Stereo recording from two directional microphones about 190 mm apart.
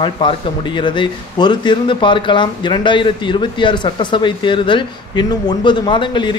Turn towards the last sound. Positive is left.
turn(degrees=25)  # may be behind; listen again after turning